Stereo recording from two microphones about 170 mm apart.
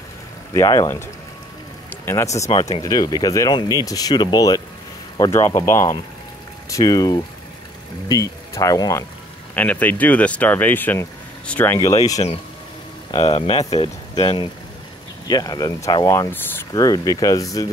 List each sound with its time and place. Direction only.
0.5 s speech: 20° left (ahead or behind)
2.0 s speech: 15° left (ahead or behind)
11.9 s speech: 25° left (ahead or behind)